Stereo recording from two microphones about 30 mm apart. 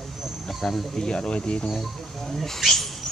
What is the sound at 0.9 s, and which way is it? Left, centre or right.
Speech, left.